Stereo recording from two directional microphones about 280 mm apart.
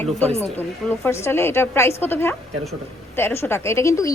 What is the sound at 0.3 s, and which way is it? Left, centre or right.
A woman's voice, centre.